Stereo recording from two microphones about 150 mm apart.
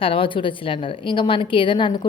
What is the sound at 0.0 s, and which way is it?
A woman's voice, 35° left (ahead or behind).